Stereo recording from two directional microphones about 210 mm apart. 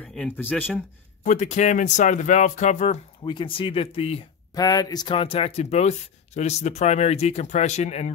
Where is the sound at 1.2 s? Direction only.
35° left (ahead or behind).